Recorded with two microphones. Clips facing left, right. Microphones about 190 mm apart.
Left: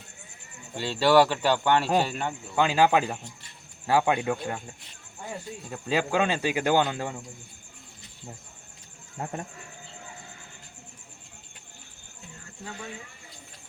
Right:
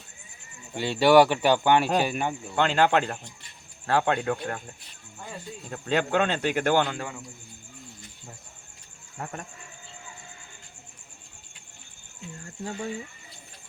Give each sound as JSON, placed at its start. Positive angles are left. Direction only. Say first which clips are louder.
{"t": 0.8, "sound": "speech", "louder": "right 2 dB", "side_deg": -15}
{"t": 2.6, "sound": "speech", "louder": "left 1 dB", "side_deg": 10}
{"t": 5.7, "sound": "speech", "louder": "right 1 dB", "side_deg": 5}
{"t": 9.1, "sound": "speech", "louder": "left 3 dB", "side_deg": 25}